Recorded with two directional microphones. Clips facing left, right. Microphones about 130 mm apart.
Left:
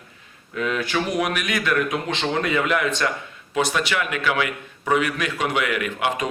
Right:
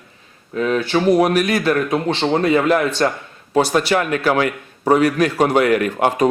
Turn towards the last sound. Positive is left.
turn(degrees=-40)  # may be behind; listen again after turning